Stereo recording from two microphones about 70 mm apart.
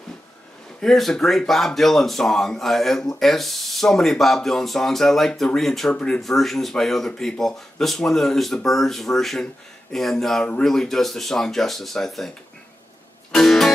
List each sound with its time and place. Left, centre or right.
0.7 s speech: centre
5.9 s speech: centre
6.2 s speech: centre
13.3 s music: centre